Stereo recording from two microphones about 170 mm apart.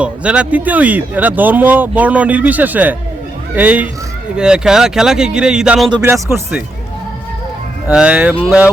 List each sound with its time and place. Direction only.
0.0 s a man's voice: 5° right (ahead or behind)
5.9 s speech: 20° right (ahead or behind)
7.9 s speech: 10° right (ahead or behind)